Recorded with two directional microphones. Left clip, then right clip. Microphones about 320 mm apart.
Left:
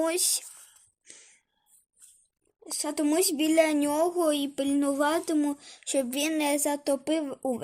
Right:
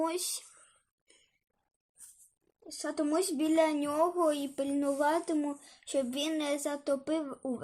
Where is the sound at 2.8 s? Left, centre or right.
Left.